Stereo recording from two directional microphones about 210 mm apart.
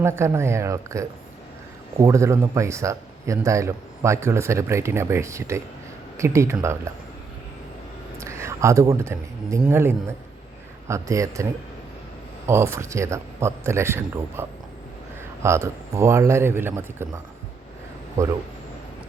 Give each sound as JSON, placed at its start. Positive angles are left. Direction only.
{"t": 0.0, "sound": "a man's voice", "side_deg": -10}
{"t": 8.2, "sound": "a man's voice", "side_deg": -15}
{"t": 12.5, "sound": "a man's voice", "side_deg": -15}
{"t": 15.4, "sound": "a man's voice", "side_deg": -15}